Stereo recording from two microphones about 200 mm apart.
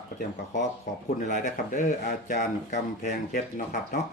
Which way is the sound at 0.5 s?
40° left (ahead or behind).